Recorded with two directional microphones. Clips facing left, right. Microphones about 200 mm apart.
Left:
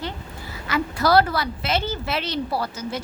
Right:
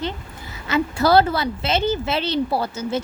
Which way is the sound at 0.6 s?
25° right (ahead or behind).